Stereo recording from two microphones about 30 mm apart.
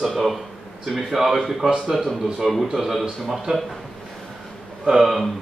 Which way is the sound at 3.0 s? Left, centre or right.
Centre.